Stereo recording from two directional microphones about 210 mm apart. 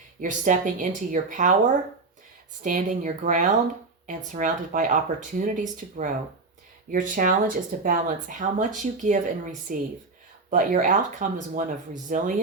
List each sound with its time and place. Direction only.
0.2 s speech: 35° right (ahead or behind)